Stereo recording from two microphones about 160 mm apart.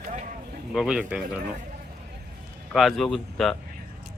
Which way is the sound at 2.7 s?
Centre (ahead or behind).